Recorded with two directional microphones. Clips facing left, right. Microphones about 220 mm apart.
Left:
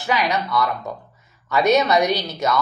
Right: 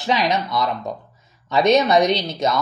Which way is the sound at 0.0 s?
20° right (ahead or behind).